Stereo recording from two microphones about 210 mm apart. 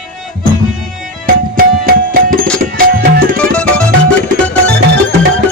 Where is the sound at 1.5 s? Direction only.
45° right (ahead or behind).